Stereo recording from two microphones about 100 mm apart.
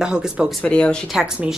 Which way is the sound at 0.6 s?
10° left (ahead or behind).